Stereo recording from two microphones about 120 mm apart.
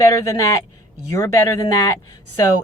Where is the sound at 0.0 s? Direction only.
25° left (ahead or behind).